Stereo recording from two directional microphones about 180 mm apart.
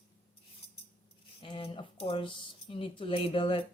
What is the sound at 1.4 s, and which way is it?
Speech, 30° left (ahead or behind).